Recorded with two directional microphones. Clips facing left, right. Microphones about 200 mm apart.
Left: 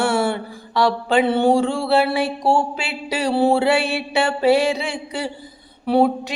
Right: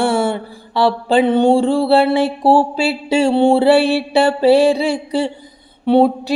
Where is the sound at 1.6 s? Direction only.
35° right (ahead or behind).